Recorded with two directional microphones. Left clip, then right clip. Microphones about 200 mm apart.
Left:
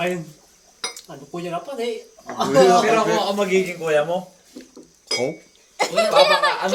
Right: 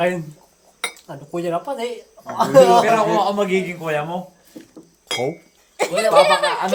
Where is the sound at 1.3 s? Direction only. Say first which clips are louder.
Right 5 dB; 30° right (ahead or behind).